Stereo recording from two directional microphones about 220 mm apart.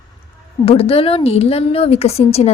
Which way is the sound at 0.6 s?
25° left (ahead or behind).